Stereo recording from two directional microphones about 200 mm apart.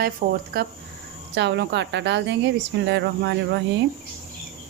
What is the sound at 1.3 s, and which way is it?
Speech, 60° right (ahead or behind).